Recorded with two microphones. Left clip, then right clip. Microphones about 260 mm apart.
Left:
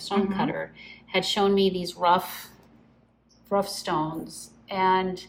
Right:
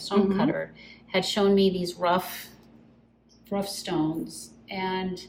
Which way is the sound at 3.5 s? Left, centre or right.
Centre.